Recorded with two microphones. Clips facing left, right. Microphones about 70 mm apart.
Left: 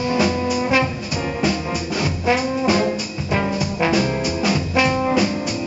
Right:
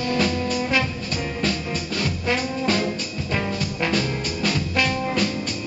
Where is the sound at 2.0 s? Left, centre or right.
Centre.